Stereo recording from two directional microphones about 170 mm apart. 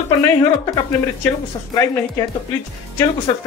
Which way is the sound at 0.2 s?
15° left (ahead or behind).